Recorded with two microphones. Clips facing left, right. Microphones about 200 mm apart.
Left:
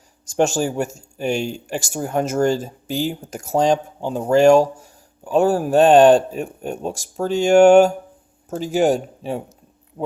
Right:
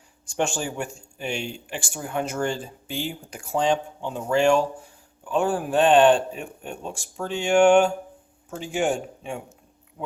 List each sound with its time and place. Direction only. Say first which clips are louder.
0.3 s speech: left 8 dB; 40° left (ahead or behind)